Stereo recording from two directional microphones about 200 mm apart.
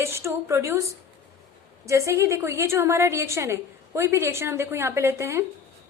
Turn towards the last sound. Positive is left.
turn(degrees=-10)  # may be behind; listen again after turning